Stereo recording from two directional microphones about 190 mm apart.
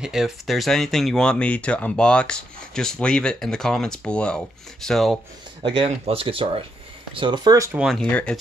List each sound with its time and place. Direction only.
0.0 s speech: centre (ahead or behind)
5.6 s speech: 30° right (ahead or behind)
7.8 s speech: 5° left (ahead or behind)